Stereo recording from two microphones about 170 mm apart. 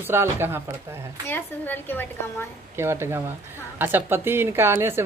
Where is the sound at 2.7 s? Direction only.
15° right (ahead or behind).